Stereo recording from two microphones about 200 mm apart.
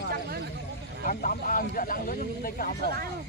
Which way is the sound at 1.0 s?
45° left (ahead or behind).